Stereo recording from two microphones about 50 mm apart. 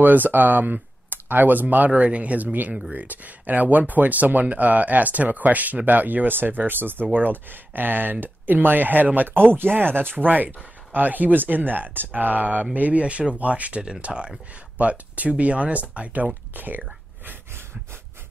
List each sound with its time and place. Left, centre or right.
0.0 s speech: right